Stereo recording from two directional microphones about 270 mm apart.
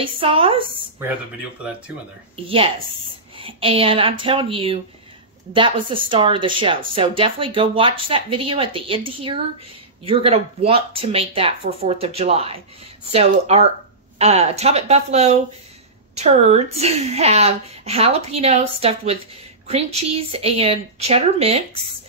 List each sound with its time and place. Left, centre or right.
0.0 s a woman's voice: centre
2.3 s a woman's voice: centre